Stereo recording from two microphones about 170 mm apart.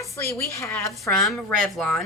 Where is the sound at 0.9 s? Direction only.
Centre (ahead or behind).